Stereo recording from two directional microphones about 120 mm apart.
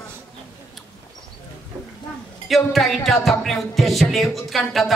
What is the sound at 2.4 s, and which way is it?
Music, centre (ahead or behind).